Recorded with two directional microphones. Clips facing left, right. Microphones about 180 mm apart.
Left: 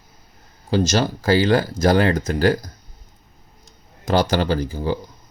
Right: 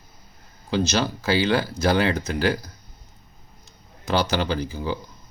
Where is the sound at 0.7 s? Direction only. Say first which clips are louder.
Left 4 dB; 45° left (ahead or behind).